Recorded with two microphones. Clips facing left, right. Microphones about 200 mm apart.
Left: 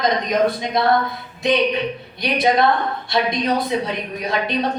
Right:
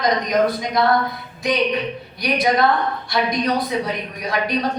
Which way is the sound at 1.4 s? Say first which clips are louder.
Left 2 dB; 25° left (ahead or behind).